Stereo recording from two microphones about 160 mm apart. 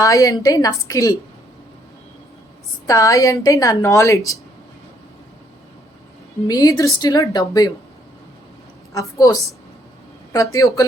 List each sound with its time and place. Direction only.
0.0 s a woman's voice: 20° left (ahead or behind)
2.8 s a woman's voice: 20° left (ahead or behind)
6.5 s a woman's voice: 25° left (ahead or behind)
8.9 s a woman's voice: 20° left (ahead or behind)